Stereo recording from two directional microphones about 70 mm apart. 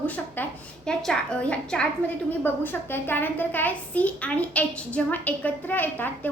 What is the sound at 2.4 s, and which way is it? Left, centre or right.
A woman's voice, left.